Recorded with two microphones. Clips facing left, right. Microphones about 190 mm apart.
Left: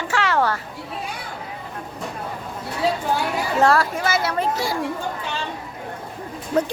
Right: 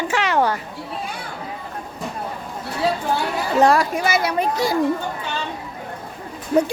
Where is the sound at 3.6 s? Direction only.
15° right (ahead or behind).